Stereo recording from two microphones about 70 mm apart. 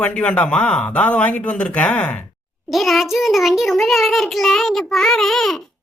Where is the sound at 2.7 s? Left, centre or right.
Centre.